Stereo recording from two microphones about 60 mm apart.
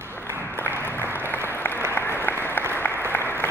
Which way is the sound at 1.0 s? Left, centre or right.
Right.